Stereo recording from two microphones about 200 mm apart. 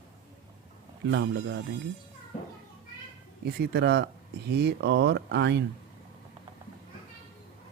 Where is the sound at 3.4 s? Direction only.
55° right (ahead or behind).